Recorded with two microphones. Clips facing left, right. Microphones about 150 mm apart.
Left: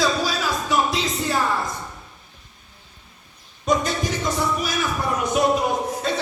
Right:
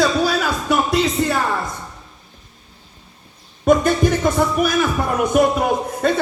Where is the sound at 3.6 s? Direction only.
55° right (ahead or behind).